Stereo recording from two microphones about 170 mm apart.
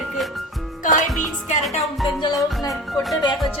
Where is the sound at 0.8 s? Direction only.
50° left (ahead or behind).